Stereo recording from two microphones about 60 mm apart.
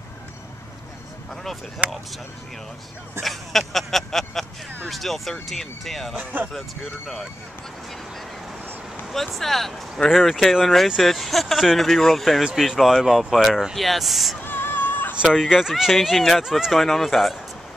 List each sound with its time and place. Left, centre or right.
1.3 s speech: centre
3.2 s speech: centre
6.1 s speech: right
6.5 s speech: centre
9.1 s speech: centre
14.4 s a sound: left
15.3 s speech: centre
16.8 s speech: centre